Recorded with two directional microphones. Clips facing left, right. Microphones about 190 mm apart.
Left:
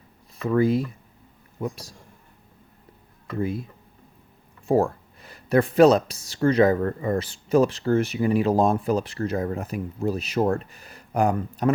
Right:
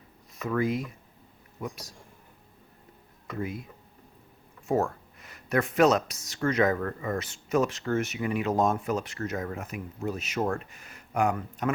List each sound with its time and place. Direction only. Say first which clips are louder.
0.4 s speech: left 7 dB; 30° left (ahead or behind)
3.4 s speech: left 8 dB; 30° left (ahead or behind)